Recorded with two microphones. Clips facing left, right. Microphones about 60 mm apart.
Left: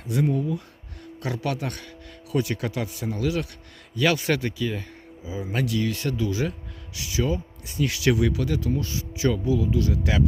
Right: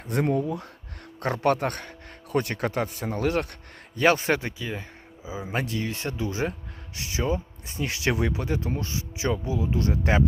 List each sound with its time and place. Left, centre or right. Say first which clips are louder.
0.0 s speech: even; right
3.9 s speech: right 1 dB; right